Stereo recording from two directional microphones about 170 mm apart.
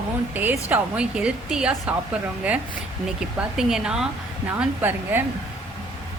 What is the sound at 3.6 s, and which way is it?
A woman's voice, 5° right (ahead or behind).